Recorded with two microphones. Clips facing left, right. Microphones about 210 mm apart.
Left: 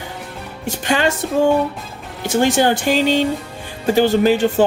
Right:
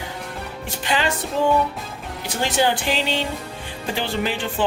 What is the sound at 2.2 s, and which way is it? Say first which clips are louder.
Speech: left 6 dB; 45° left (ahead or behind).